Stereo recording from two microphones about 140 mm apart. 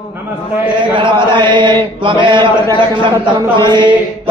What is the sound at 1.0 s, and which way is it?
Mantra, 35° right (ahead or behind).